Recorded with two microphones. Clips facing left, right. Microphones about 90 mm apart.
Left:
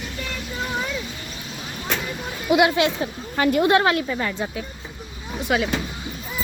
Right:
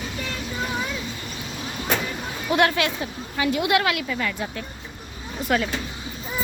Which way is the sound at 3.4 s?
45° left (ahead or behind).